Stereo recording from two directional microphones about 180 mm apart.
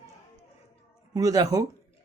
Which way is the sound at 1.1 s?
20° right (ahead or behind).